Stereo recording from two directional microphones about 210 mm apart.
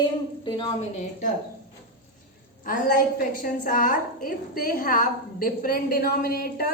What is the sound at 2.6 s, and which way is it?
A woman's voice, 40° left (ahead or behind).